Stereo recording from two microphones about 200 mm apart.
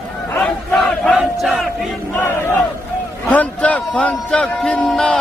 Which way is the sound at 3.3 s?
5° left (ahead or behind).